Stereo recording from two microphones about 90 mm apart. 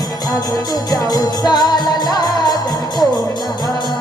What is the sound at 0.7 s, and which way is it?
Music, 45° left (ahead or behind).